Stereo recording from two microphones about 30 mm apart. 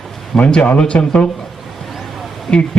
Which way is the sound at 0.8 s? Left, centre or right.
Left.